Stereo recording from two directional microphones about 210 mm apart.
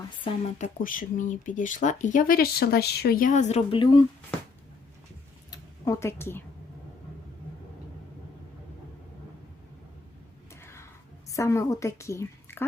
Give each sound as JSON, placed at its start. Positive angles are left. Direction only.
{"t": 0.3, "sound": "speech", "side_deg": 35}
{"t": 5.5, "sound": "a sound", "side_deg": 15}
{"t": 10.5, "sound": "music", "side_deg": 10}
{"t": 11.3, "sound": "a woman's voice", "side_deg": 15}